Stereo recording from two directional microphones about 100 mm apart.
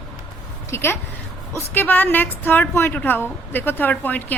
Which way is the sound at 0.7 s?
25° left (ahead or behind).